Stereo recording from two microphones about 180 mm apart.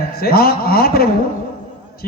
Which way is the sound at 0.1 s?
60° left (ahead or behind).